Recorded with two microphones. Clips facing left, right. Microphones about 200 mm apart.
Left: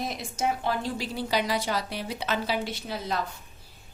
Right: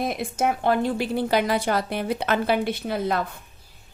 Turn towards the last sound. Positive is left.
turn(degrees=-55)  # may be behind; listen again after turning